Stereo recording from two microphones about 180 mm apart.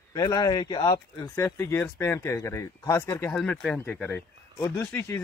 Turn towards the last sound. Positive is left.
turn(degrees=10)  # may be behind; listen again after turning